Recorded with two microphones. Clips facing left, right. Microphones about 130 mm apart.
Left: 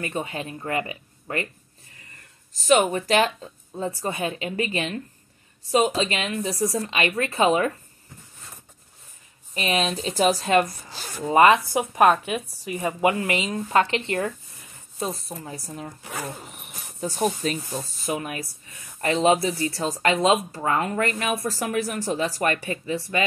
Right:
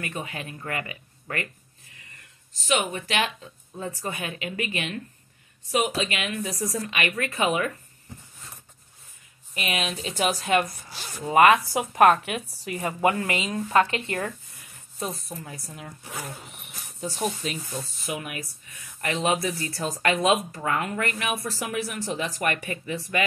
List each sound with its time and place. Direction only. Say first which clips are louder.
0.0 s speech: left 5 dB; 30° left (ahead or behind)
2.5 s speech: left 7 dB; 40° left (ahead or behind)
9.5 s speech: left 5 dB; 30° left (ahead or behind); by 13.8 s 15° left (ahead or behind)
13.8 s speech: left 4 dB; 25° left (ahead or behind)
16.6 s cricket: left 3 dB; 45° left (ahead or behind)
17.6 s speech: left 4 dB; 40° left (ahead or behind)